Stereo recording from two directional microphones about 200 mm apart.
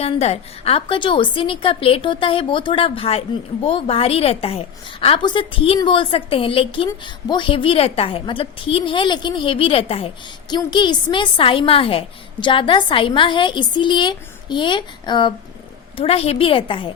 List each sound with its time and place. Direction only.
0.0 s a woman's voice: 30° left (ahead or behind)